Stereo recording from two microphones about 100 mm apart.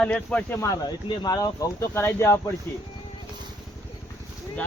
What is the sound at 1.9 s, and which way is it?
Speech, 25° left (ahead or behind).